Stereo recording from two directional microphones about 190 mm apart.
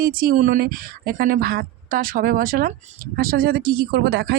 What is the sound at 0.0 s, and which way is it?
A woman's voice, 50° right (ahead or behind).